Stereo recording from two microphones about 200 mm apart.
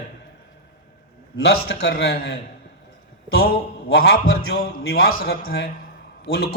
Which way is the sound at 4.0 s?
50° left (ahead or behind).